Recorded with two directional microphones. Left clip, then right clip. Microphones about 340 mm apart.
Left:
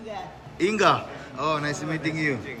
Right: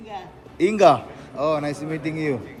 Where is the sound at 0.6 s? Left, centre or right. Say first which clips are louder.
Right 5 dB; centre.